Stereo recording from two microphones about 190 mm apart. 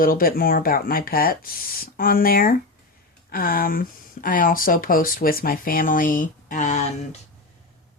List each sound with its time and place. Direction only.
0.0 s speech: 50° left (ahead or behind)